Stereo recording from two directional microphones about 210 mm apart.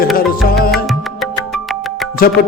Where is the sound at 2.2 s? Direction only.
45° left (ahead or behind).